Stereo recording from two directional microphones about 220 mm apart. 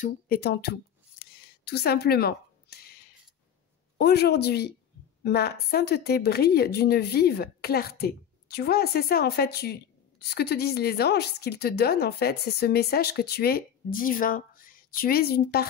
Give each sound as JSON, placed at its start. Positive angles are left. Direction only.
{"t": 0.0, "sound": "a woman's voice", "side_deg": 45}
{"t": 1.2, "sound": "a sound", "side_deg": 45}
{"t": 4.0, "sound": "a woman's voice", "side_deg": 45}